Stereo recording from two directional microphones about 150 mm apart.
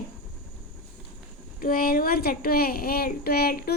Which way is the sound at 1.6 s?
75° left (ahead or behind).